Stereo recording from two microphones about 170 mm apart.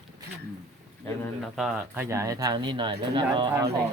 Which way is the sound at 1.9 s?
15° right (ahead or behind).